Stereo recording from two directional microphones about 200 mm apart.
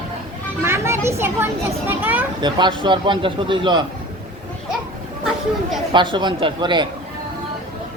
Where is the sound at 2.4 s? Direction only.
25° right (ahead or behind).